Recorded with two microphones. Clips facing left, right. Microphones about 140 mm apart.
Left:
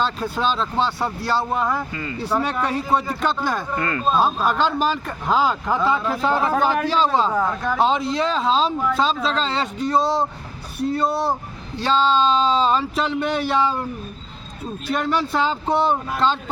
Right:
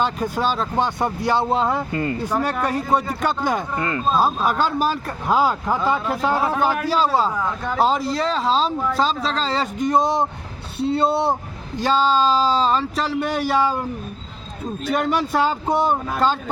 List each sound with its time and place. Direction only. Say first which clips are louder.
0.0 s speech: right 1 dB; 10° right (ahead or behind)
1.9 s speech: right 6 dB; 50° right (ahead or behind)
2.2 s speech: even; 10° right (ahead or behind)
4.1 s speech: even; 5° right (ahead or behind)
9.7 s speech: right 1 dB; 15° right (ahead or behind)
11.9 s speech: even; 10° right (ahead or behind)
14.9 s speech: right 1 dB; 10° right (ahead or behind)